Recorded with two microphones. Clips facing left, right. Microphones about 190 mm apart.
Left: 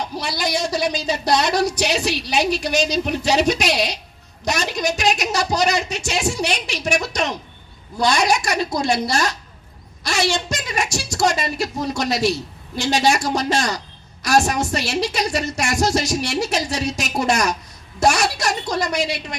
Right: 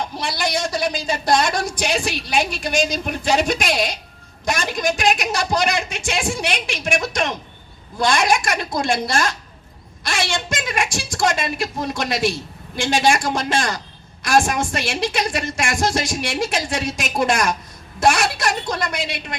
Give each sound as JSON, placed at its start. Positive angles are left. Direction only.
{"t": 0.2, "sound": "a woman's voice", "side_deg": -50}